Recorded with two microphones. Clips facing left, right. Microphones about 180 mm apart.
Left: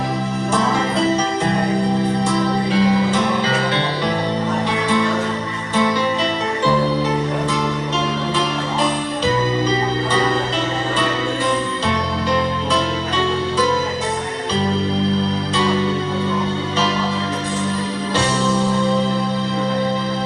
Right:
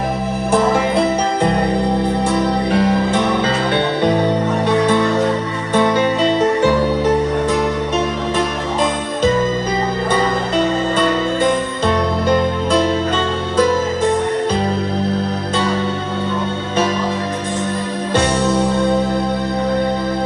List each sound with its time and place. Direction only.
0.5 s music: 60° right (ahead or behind)
2.2 s music: 60° right (ahead or behind)
5.7 s music: 55° right (ahead or behind)